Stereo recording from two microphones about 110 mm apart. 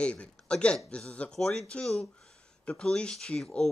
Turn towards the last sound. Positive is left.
turn(degrees=5)  # may be behind; listen again after turning